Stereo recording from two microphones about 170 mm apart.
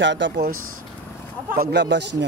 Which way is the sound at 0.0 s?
90° right.